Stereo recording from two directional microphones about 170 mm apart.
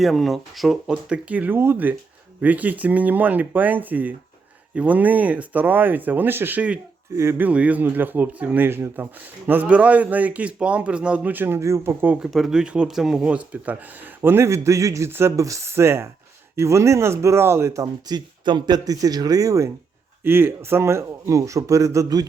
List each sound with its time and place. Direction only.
0.0 s a man's voice: centre (ahead or behind); by 22.3 s 20° right (ahead or behind)